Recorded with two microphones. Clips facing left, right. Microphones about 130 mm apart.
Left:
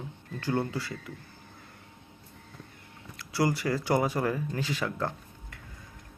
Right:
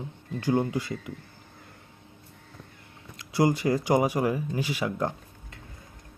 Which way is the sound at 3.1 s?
20° right (ahead or behind).